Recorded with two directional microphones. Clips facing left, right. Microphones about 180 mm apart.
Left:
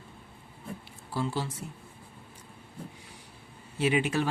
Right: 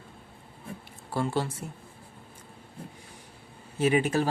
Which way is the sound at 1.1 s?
55° right (ahead or behind).